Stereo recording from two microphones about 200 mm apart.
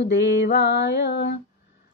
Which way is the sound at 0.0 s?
60° left (ahead or behind).